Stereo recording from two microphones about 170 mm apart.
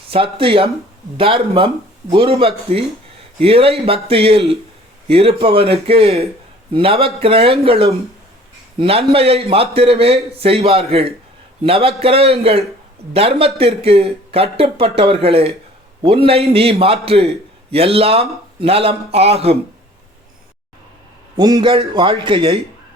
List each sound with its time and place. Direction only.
0.1 s speech: 30° right (ahead or behind)
21.3 s a man's voice: 25° right (ahead or behind)